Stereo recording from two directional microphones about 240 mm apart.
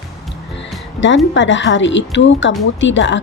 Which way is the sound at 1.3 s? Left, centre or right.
Left.